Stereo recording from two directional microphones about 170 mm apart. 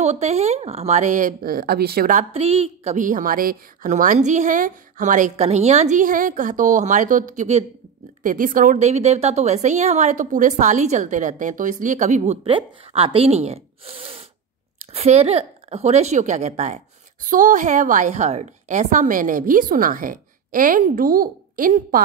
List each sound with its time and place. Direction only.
0.0 s a woman's voice: 40° right (ahead or behind)
2.4 s a woman's voice: 35° right (ahead or behind)
12.4 s a woman's voice: 30° right (ahead or behind); by 22.0 s 55° right (ahead or behind)